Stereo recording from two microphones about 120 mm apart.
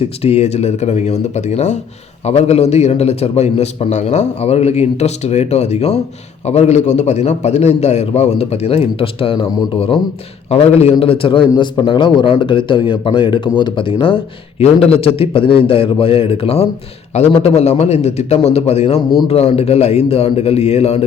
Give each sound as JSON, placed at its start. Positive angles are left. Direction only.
{"t": 0.2, "sound": "a man's voice", "side_deg": 60}
{"t": 2.2, "sound": "a man's voice", "side_deg": 65}
{"t": 14.6, "sound": "a man's voice", "side_deg": 55}